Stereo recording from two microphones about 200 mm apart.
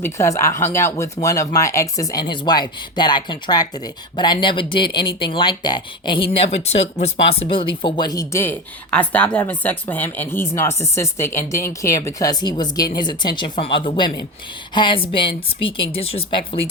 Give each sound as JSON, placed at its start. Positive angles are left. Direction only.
{"t": 0.0, "sound": "speech", "side_deg": 15}